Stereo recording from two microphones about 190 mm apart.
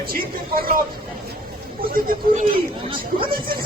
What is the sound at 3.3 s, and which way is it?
Speech, 50° right (ahead or behind).